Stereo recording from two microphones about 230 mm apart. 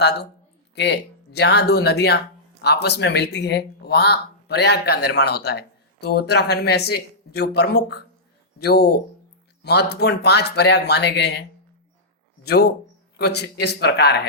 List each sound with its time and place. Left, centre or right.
0.0 s speech: left
12.5 s speech: left